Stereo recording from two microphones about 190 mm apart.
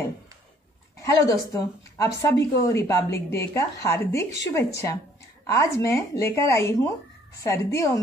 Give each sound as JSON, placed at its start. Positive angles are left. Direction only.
{"t": 0.9, "sound": "speech", "side_deg": 15}